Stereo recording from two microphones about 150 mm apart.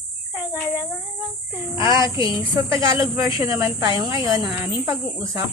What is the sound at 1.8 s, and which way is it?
Speech, 20° right (ahead or behind).